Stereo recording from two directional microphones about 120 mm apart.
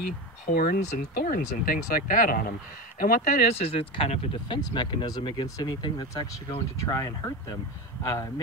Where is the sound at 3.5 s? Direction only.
55° left (ahead or behind).